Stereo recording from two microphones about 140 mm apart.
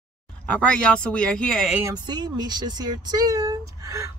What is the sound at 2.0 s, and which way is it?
Speech, 30° right (ahead or behind).